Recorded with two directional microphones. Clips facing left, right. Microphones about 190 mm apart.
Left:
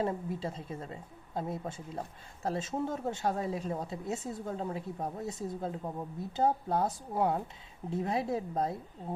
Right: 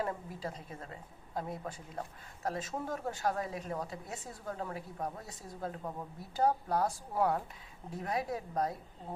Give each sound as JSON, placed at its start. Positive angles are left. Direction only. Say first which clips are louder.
{"t": 0.0, "sound": "speech", "louder": "left 4 dB", "side_deg": 25}